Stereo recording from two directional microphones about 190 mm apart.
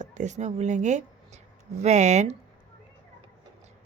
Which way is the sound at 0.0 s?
40° right (ahead or behind).